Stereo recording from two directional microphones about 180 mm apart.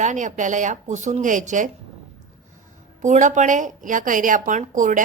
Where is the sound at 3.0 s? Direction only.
45° right (ahead or behind).